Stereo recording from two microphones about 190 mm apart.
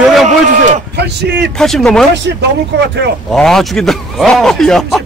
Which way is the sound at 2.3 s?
70° right (ahead or behind).